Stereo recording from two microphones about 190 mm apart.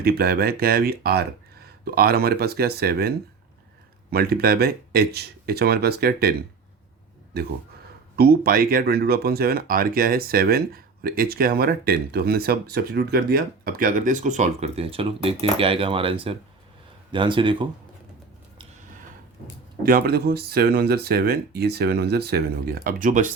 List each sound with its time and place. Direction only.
0.0 s speech: 55° right (ahead or behind)
7.3 s speech: 55° right (ahead or behind); by 17.7 s 25° right (ahead or behind)
19.8 s speech: 50° right (ahead or behind)